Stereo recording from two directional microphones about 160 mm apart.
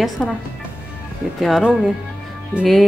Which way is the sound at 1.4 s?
Centre (ahead or behind).